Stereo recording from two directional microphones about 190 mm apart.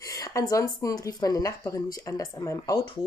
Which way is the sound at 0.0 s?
15° left (ahead or behind).